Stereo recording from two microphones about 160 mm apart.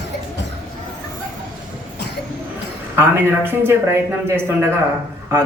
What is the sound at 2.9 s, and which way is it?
A man's voice, 15° right (ahead or behind).